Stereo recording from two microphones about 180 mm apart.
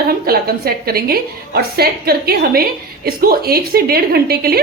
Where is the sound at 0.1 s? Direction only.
55° right (ahead or behind).